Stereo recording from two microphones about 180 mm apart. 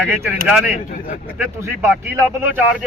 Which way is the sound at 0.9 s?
50° left (ahead or behind).